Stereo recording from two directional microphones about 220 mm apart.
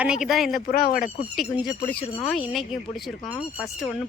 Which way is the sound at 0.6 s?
40° left (ahead or behind).